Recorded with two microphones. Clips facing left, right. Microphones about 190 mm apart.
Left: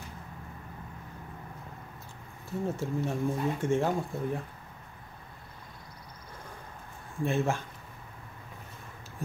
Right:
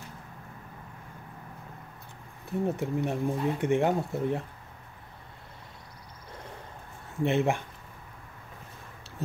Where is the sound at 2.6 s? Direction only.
15° right (ahead or behind).